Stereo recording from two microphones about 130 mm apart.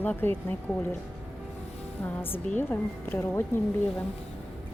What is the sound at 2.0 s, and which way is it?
A woman's voice, 15° left (ahead or behind).